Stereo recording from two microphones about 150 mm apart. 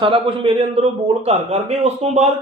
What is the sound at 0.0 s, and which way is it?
A man's voice, 35° right (ahead or behind).